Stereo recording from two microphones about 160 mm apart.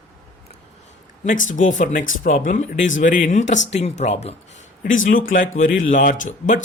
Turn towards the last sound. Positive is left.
turn(degrees=50)  # may be behind; listen again after turning